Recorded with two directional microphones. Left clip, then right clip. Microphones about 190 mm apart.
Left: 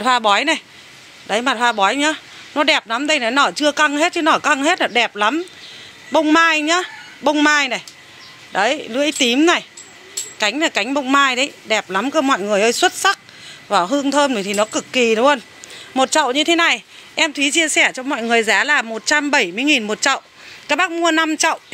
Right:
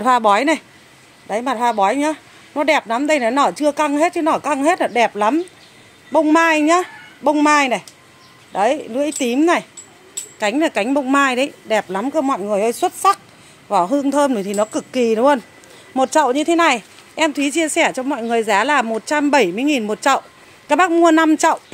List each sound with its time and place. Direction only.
0.0 s speech: 15° right (ahead or behind)
1.2 s a man's voice: centre (ahead or behind); by 21.5 s 15° right (ahead or behind)